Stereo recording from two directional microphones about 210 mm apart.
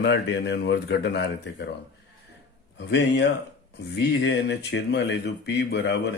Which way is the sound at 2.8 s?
55° left (ahead or behind).